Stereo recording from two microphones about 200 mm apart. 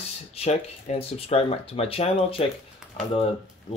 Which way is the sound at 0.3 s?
30° left (ahead or behind).